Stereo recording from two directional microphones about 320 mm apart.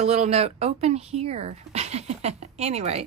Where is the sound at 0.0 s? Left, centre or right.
Centre.